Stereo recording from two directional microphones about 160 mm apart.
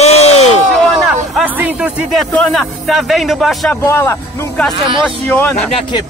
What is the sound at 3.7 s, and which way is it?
Speech, 15° left (ahead or behind).